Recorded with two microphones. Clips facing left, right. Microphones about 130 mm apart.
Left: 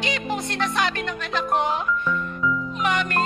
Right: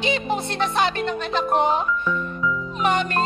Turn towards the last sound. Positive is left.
turn(degrees=-30)  # may be behind; listen again after turning